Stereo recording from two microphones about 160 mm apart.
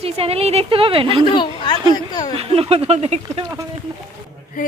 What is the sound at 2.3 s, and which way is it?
A woman's voice, 35° right (ahead or behind).